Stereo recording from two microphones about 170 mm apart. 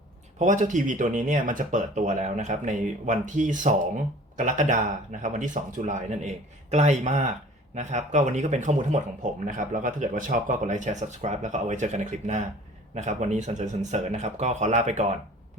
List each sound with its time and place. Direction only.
0.3 s speech: 45° right (ahead or behind)